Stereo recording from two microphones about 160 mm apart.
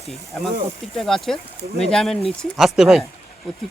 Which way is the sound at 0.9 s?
Centre (ahead or behind).